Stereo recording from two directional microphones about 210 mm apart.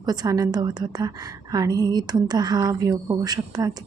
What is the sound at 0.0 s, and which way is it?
A woman's voice, 20° right (ahead or behind).